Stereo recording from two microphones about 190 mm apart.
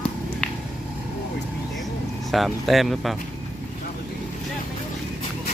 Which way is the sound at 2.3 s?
Centre (ahead or behind).